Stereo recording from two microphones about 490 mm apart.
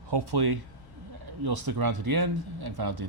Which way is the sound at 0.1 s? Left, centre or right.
Right.